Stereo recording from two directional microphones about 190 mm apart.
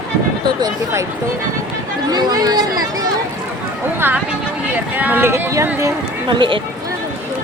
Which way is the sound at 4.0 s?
10° right (ahead or behind).